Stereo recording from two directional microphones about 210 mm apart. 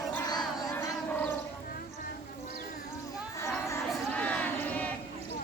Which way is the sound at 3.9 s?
5° left (ahead or behind).